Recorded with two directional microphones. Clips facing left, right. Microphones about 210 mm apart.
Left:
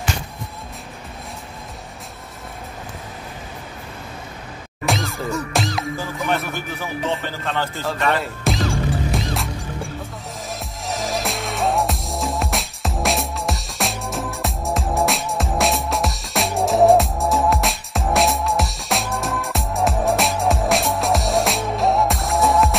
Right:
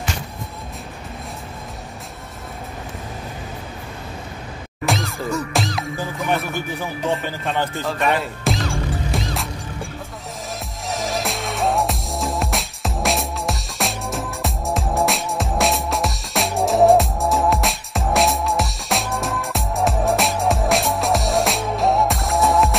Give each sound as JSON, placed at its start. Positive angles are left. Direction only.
{"t": 4.8, "sound": "music", "side_deg": 0}
{"t": 7.4, "sound": "speech", "side_deg": -15}
{"t": 8.2, "sound": "speech", "side_deg": 0}
{"t": 9.1, "sound": "music", "side_deg": 0}
{"t": 10.9, "sound": "music", "side_deg": 0}